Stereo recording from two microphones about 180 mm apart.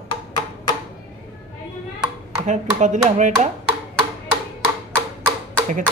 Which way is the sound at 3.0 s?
45° right (ahead or behind).